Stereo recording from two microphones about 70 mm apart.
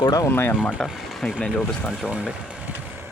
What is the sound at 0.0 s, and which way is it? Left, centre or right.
Speech, left.